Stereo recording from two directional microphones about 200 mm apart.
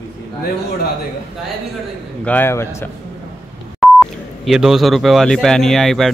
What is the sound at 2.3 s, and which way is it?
Speech, 10° left (ahead or behind).